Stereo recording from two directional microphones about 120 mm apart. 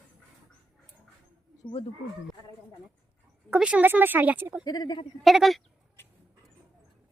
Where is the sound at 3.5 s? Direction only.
10° right (ahead or behind).